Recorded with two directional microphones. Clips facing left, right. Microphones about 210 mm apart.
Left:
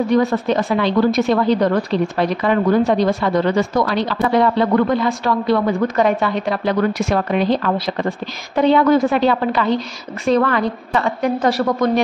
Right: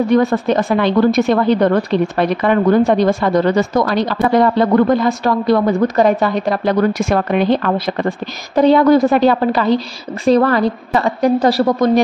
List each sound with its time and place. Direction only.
0.1 s a woman's voice: 50° right (ahead or behind)
8.5 s a woman's voice: 40° right (ahead or behind)